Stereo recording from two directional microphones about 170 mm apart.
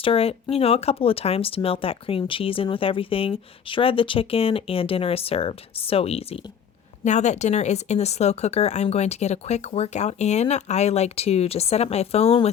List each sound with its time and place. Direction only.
0.0 s speech: 35° left (ahead or behind)